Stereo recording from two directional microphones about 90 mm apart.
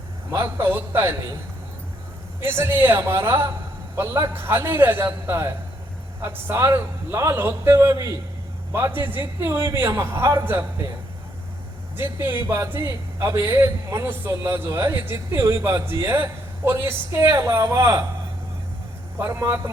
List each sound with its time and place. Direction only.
0.7 s a man's voice: 25° right (ahead or behind)
2.4 s a man's voice: 25° right (ahead or behind)
8.7 s a man's voice: 25° right (ahead or behind)
11.9 s a man's voice: 25° right (ahead or behind)
19.2 s a man's voice: 25° right (ahead or behind)